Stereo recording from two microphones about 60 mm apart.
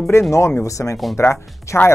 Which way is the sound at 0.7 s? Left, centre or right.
Left.